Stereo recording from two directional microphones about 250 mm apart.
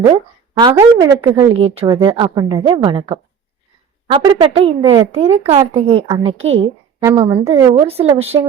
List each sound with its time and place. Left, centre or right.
0.0 s a woman's voice: centre